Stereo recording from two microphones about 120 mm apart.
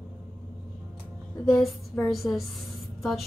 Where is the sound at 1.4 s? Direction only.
Centre (ahead or behind).